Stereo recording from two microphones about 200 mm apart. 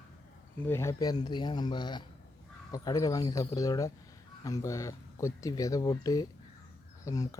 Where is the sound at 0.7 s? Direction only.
15° left (ahead or behind).